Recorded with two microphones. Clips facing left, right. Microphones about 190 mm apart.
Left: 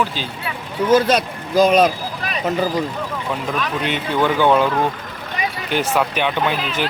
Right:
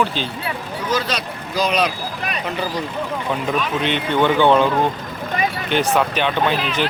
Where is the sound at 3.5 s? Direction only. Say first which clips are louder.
Right 1 dB; centre (ahead or behind).